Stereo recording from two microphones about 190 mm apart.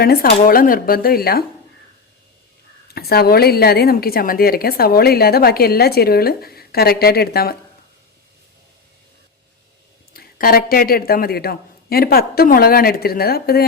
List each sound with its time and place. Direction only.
0.0 s a woman's voice: 55° left (ahead or behind)
2.9 s a woman's voice: 55° left (ahead or behind)
10.2 s a woman's voice: 50° left (ahead or behind)